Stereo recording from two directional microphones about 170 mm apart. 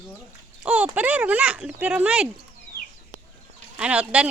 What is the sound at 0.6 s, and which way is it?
Speech, 10° right (ahead or behind).